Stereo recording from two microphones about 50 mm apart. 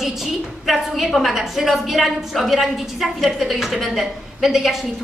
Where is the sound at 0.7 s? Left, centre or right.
Centre.